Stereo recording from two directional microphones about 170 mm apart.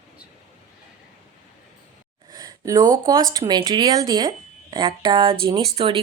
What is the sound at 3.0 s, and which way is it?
A woman's voice, 20° right (ahead or behind).